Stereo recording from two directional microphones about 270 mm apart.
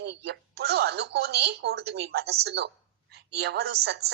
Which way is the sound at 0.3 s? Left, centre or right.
Right.